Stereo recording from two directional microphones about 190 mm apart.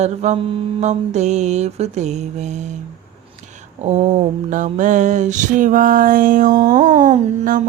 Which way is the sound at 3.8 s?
35° right (ahead or behind).